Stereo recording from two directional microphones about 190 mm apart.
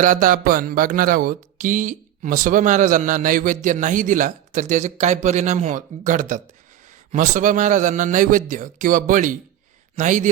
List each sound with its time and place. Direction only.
0.0 s a man's voice: 45° right (ahead or behind)